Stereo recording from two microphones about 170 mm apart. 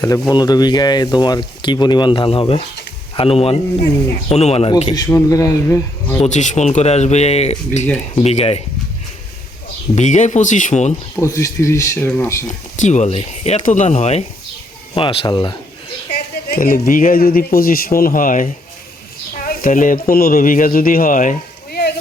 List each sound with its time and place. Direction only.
0.0 s speech: 25° left (ahead or behind)
5.0 s speech: 20° left (ahead or behind)
6.2 s speech: 45° left (ahead or behind)
9.9 s speech: 45° left (ahead or behind)
11.2 s speech: 15° left (ahead or behind)
12.5 s speech: 45° left (ahead or behind); by 15.5 s 30° left (ahead or behind)
16.5 s a man's voice: 55° left (ahead or behind)
19.5 s speech: 55° left (ahead or behind)